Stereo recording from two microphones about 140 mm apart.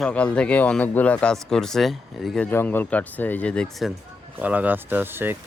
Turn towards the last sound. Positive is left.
turn(degrees=-15)  # may be behind; listen again after turning